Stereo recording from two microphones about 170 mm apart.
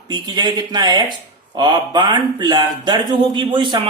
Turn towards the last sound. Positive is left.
turn(degrees=-25)  # may be behind; listen again after turning